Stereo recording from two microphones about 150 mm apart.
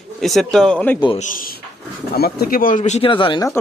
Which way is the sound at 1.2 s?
60° left (ahead or behind).